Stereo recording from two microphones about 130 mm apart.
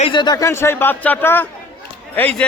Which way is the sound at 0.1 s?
35° left (ahead or behind).